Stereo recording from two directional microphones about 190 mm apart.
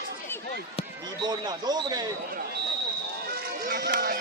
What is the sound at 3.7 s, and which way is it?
Music, 50° right (ahead or behind).